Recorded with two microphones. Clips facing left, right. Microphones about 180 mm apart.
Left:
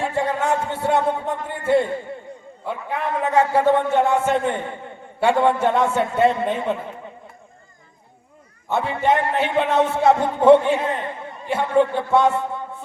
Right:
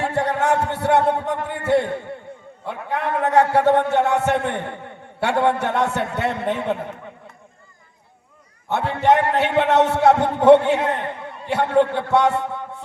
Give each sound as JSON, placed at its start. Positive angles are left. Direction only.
{"t": 0.0, "sound": "a man's voice", "side_deg": -65}
{"t": 8.7, "sound": "a man's voice", "side_deg": -65}